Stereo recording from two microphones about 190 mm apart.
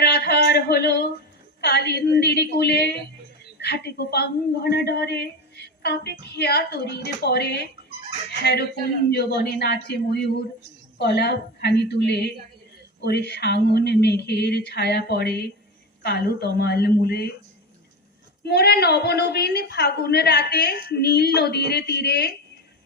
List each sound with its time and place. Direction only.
0.0 s a sound: 60° left (ahead or behind)
1.6 s a woman's voice: 60° left (ahead or behind)
18.4 s a woman's voice: 60° left (ahead or behind)